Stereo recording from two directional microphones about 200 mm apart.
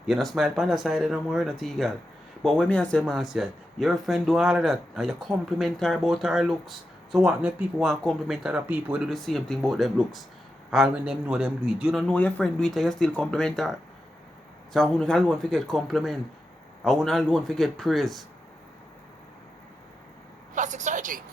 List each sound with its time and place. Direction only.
0.1 s speech: centre (ahead or behind)
20.6 s a woman's voice: 35° right (ahead or behind)